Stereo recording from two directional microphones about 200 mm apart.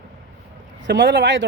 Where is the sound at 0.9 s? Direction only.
60° right (ahead or behind).